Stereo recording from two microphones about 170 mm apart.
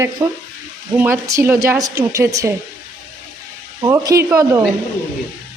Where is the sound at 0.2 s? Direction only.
20° right (ahead or behind).